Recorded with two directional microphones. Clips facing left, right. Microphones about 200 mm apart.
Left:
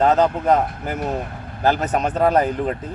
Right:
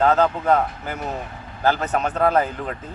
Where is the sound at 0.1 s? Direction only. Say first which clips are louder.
Left 2 dB; 20° left (ahead or behind).